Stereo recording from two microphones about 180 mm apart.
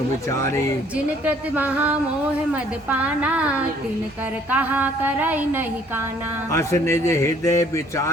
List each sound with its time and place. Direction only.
0.3 s speech: 15° left (ahead or behind)
0.9 s a woman's voice: 10° right (ahead or behind)
6.5 s speech: 15° left (ahead or behind)